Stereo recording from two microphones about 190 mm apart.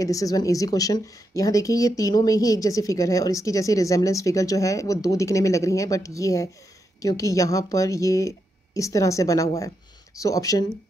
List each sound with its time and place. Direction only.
0.0 s a woman's voice: 20° left (ahead or behind)